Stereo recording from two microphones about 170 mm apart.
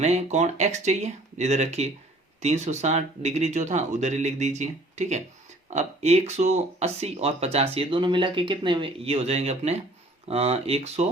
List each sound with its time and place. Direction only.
0.0 s speech: 40° right (ahead or behind)